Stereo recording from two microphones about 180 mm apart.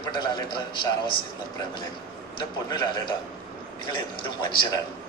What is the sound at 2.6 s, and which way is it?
A man's voice, 25° left (ahead or behind).